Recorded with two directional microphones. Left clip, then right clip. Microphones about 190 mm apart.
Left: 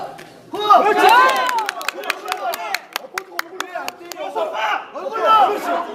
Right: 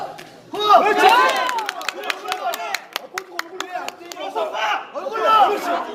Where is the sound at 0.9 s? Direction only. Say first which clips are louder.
Left 2 dB; 50° left (ahead or behind).